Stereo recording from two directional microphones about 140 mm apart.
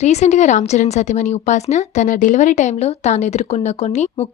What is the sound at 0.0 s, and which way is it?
Speech, 55° left (ahead or behind).